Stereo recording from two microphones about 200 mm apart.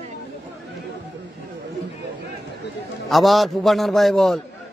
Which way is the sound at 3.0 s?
Centre (ahead or behind).